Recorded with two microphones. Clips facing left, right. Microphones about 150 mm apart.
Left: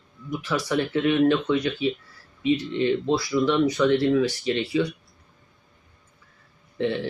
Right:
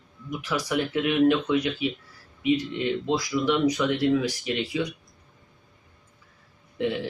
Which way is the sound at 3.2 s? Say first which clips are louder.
Left 1 dB; 15° right (ahead or behind).